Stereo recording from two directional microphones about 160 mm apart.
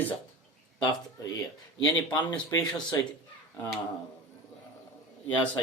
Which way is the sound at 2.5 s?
20° left (ahead or behind).